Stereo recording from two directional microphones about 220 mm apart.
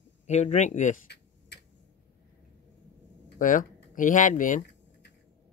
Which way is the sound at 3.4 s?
35° left (ahead or behind).